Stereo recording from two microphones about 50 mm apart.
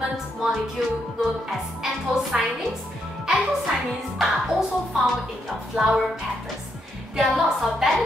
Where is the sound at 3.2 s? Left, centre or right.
Centre.